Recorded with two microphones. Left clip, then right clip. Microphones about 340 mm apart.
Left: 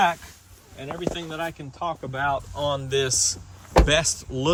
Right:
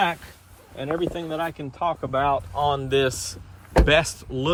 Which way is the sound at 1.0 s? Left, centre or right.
Centre.